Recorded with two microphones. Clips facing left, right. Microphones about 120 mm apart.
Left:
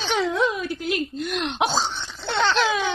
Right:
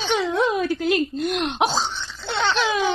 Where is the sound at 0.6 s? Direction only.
90° right.